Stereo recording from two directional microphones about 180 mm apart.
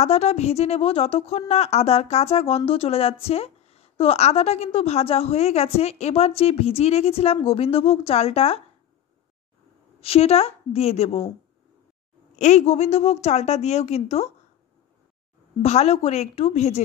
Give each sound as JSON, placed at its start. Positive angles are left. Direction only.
{"t": 0.0, "sound": "speech", "side_deg": 35}
{"t": 9.9, "sound": "speech", "side_deg": 35}
{"t": 12.4, "sound": "speech", "side_deg": 40}
{"t": 15.6, "sound": "speech", "side_deg": 35}